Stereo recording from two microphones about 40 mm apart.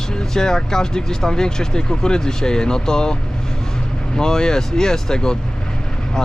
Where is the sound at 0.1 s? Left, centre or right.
Centre.